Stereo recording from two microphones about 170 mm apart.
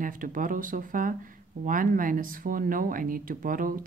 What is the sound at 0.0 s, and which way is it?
Speech, 55° right (ahead or behind).